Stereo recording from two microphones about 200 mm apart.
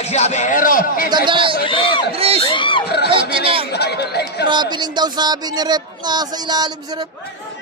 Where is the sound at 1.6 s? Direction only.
25° left (ahead or behind).